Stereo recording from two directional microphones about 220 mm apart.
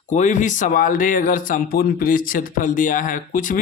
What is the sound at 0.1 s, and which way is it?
A man's voice, 35° left (ahead or behind).